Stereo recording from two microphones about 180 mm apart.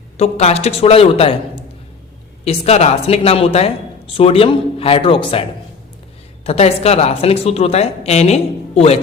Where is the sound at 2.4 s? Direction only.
35° left (ahead or behind).